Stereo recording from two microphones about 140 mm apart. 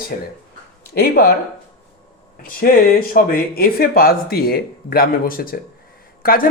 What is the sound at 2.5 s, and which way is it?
Speech, 90° left.